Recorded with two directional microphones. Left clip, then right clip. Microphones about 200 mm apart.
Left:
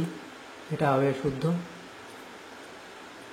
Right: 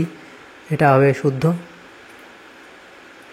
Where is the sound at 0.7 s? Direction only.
35° right (ahead or behind).